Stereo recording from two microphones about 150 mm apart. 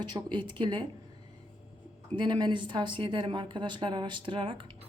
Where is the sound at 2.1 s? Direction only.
30° right (ahead or behind).